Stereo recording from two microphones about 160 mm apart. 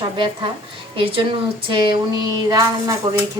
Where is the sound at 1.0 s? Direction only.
35° right (ahead or behind).